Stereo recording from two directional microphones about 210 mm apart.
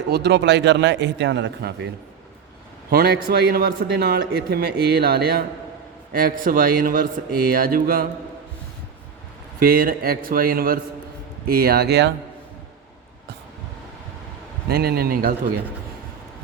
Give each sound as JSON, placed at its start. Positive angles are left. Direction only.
{"t": 0.1, "sound": "a man's voice", "side_deg": -55}
{"t": 2.9, "sound": "speech", "side_deg": -50}
{"t": 9.6, "sound": "speech", "side_deg": -45}
{"t": 14.7, "sound": "speech", "side_deg": -50}